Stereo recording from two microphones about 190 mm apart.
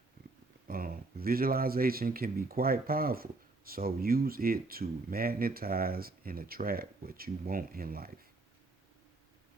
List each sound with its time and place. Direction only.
0.7 s speech: 50° right (ahead or behind)